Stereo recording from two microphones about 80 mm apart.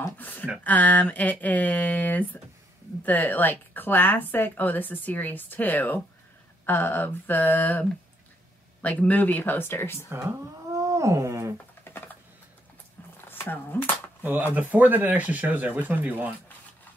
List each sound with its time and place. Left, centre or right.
0.2 s a woman's voice: left
8.8 s a woman's voice: centre
10.0 s cat: right
11.9 s typing: left
13.2 s a sound: left
14.2 s speech: right